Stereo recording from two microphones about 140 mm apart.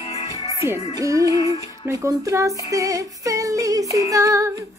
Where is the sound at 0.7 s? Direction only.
20° right (ahead or behind).